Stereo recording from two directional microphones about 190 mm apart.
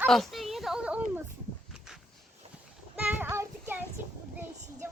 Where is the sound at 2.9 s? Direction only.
10° right (ahead or behind).